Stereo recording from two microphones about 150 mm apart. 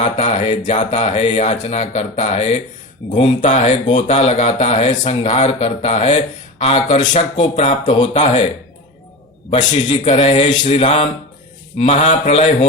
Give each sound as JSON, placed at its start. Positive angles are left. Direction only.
{"t": 0.0, "sound": "speech", "side_deg": 45}
{"t": 9.7, "sound": "speech", "side_deg": 40}